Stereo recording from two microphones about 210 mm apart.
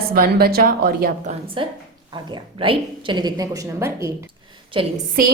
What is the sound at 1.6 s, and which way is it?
A woman's voice, 25° right (ahead or behind).